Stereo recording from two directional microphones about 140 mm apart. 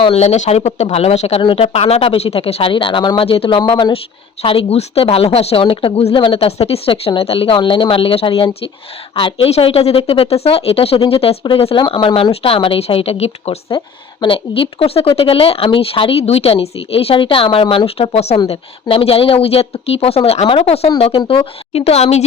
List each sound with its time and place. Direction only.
0.0 s a woman's voice: 45° left (ahead or behind)
13.7 s speech: 35° left (ahead or behind)